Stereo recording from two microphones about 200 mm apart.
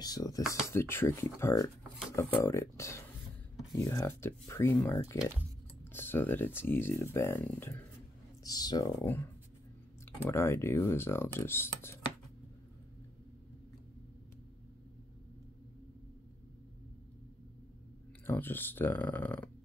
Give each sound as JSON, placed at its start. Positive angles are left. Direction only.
{"t": 0.0, "sound": "speech", "side_deg": 20}
{"t": 10.3, "sound": "speech", "side_deg": 15}
{"t": 18.2, "sound": "speech", "side_deg": 10}